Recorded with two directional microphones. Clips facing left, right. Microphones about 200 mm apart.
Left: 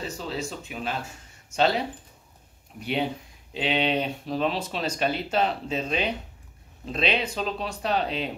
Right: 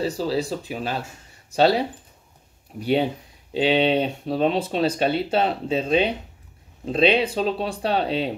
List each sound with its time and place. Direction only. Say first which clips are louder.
0.0 s speech: right 8 dB; 35° right (ahead or behind)
2.8 s speech: right 6 dB; 35° right (ahead or behind)